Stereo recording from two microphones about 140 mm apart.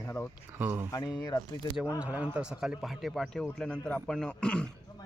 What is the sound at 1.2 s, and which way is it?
Speech, 25° left (ahead or behind).